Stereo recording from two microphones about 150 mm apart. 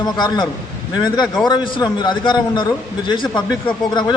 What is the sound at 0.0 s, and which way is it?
A man's voice, 30° left (ahead or behind).